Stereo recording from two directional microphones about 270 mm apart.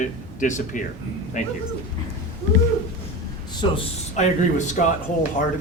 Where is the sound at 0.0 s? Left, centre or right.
Left.